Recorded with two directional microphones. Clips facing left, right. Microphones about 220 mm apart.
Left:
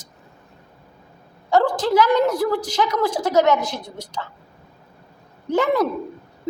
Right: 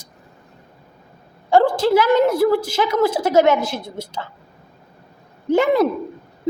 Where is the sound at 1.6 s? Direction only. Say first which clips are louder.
Right 3 dB; 10° right (ahead or behind).